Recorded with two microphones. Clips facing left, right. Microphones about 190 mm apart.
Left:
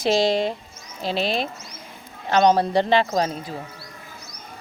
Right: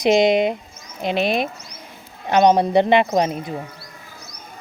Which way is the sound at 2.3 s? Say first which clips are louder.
Right 3 dB; 20° right (ahead or behind).